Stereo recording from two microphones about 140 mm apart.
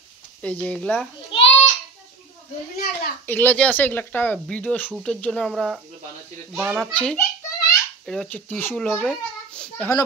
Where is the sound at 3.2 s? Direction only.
15° left (ahead or behind).